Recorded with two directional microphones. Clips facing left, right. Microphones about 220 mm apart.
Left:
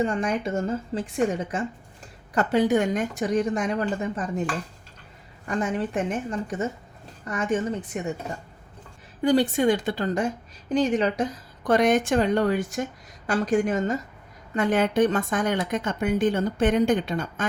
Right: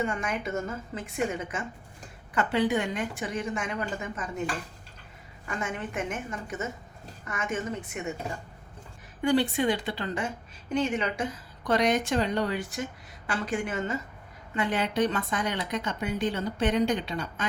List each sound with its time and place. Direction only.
0.0 s a woman's voice: 35° left (ahead or behind)
5.5 s a woman's voice: 35° left (ahead or behind)
9.2 s a woman's voice: 40° left (ahead or behind)